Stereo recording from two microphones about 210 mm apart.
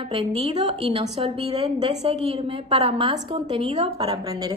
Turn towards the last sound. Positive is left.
turn(degrees=-20)  # may be behind; listen again after turning